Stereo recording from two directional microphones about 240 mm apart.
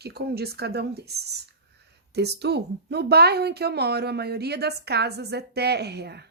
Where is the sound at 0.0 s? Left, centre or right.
Right.